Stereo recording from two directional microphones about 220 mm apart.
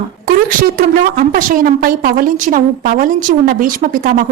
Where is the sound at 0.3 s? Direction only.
40° right (ahead or behind).